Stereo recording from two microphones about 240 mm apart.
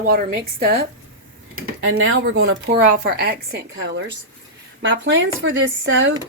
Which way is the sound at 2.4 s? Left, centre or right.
Right.